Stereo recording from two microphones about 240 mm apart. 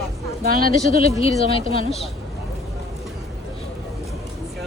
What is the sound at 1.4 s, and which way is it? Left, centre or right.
Speech, left.